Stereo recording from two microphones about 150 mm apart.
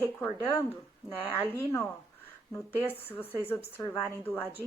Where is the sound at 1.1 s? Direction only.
10° left (ahead or behind).